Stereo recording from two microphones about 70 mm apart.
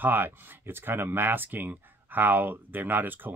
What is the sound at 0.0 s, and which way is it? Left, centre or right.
Speech, right.